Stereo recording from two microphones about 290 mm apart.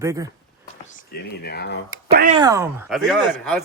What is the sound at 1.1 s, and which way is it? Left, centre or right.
Speech, left.